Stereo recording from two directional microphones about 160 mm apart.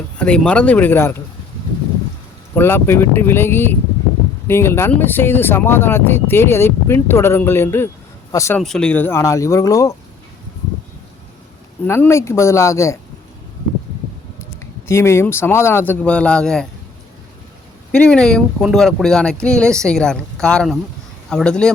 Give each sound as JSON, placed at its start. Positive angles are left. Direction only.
{"t": 0.2, "sound": "speech", "side_deg": 5}
{"t": 2.6, "sound": "speech", "side_deg": 15}
{"t": 8.5, "sound": "speech", "side_deg": 5}
{"t": 11.9, "sound": "speech", "side_deg": 15}
{"t": 14.8, "sound": "speech", "side_deg": 15}
{"t": 17.9, "sound": "speech", "side_deg": 5}